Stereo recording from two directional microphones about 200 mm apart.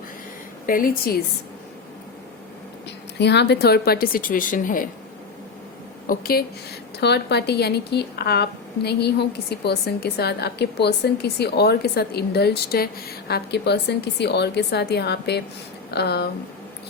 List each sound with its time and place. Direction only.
0.7 s speech: 45° left (ahead or behind)
3.2 s speech: 60° left (ahead or behind); by 4.9 s 40° left (ahead or behind)
6.1 s a woman's voice: 50° left (ahead or behind)